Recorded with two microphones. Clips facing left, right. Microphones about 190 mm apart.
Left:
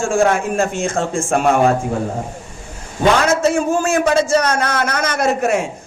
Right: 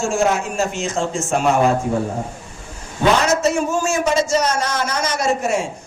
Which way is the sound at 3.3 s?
55° left (ahead or behind).